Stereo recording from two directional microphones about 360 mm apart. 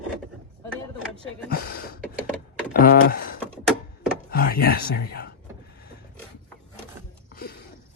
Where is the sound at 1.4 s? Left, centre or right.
Left.